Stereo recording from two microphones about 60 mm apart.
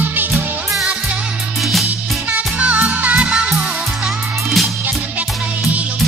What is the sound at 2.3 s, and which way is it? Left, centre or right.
Music, right.